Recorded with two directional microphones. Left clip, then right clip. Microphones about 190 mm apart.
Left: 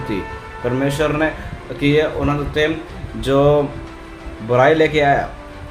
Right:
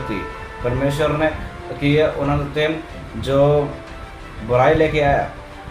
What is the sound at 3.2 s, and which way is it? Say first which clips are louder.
A man's voice: left 2 dB; 45° left (ahead or behind).